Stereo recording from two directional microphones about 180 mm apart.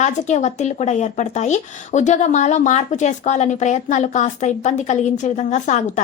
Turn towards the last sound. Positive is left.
turn(degrees=40)  # may be behind; listen again after turning